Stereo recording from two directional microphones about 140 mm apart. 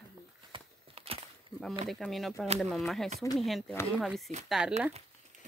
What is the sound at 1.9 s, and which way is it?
Speech, centre (ahead or behind).